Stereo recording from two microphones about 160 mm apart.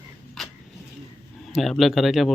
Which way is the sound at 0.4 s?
Centre (ahead or behind).